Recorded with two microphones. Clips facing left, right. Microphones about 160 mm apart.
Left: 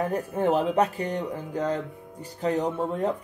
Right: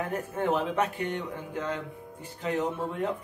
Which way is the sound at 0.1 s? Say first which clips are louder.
Left 4 dB; 35° left (ahead or behind).